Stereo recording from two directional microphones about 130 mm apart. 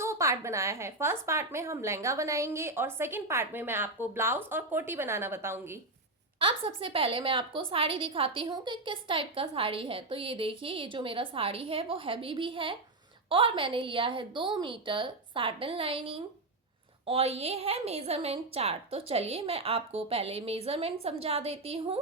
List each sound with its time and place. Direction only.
0.0 s a woman's voice: 25° right (ahead or behind)
6.4 s a woman's voice: 45° right (ahead or behind)